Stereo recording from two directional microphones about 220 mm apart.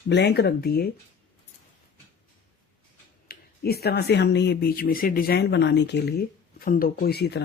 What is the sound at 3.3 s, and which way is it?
Speech, 45° left (ahead or behind).